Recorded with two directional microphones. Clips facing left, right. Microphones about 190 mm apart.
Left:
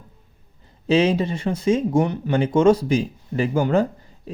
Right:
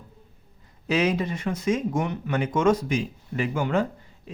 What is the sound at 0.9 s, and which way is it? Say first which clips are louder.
Speech: left 5 dB; 30° left (ahead or behind).